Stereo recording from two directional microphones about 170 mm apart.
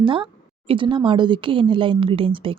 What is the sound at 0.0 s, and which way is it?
A woman's voice, 30° right (ahead or behind).